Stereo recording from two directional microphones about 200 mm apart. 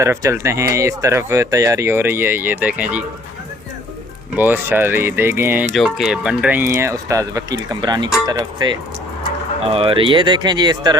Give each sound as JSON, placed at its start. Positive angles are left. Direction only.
{"t": 0.0, "sound": "speech", "side_deg": -15}
{"t": 4.4, "sound": "speech", "side_deg": -10}